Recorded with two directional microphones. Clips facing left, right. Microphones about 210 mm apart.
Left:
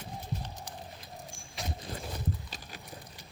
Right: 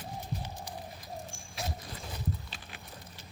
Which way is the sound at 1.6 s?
Centre (ahead or behind).